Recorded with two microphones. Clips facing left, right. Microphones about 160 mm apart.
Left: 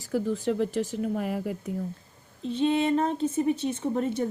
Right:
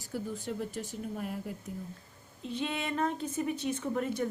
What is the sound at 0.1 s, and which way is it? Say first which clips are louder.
Speech: left 10 dB; 90° left.